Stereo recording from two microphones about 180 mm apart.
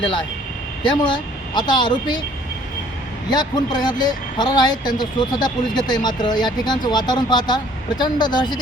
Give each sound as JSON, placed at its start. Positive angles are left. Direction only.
{"t": 0.8, "sound": "speech", "side_deg": 25}
{"t": 3.2, "sound": "speech", "side_deg": 25}